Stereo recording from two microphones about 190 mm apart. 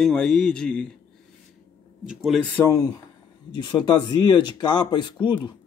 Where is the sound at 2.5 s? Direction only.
15° left (ahead or behind).